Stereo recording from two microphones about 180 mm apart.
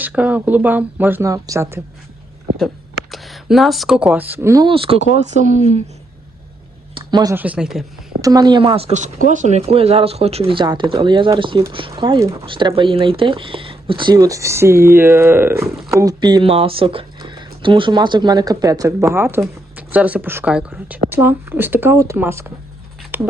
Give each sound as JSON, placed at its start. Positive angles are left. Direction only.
{"t": 0.0, "sound": "speech", "side_deg": -10}
{"t": 2.6, "sound": "speech", "side_deg": 0}
{"t": 4.7, "sound": "speech", "side_deg": -30}
{"t": 5.3, "sound": "speech", "side_deg": -40}
{"t": 6.9, "sound": "a sound", "side_deg": -25}
{"t": 7.3, "sound": "speech", "side_deg": -10}
{"t": 8.2, "sound": "speech", "side_deg": -20}
{"t": 23.1, "sound": "a sound", "side_deg": -10}